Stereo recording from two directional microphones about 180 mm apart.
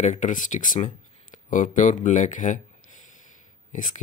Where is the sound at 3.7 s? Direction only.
45° left (ahead or behind).